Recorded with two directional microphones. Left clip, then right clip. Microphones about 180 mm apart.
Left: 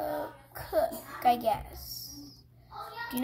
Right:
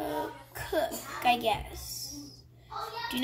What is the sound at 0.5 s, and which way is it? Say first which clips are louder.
A child's voice: left 2 dB; 5° left (ahead or behind).